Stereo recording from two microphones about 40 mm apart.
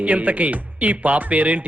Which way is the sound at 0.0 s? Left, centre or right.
Right.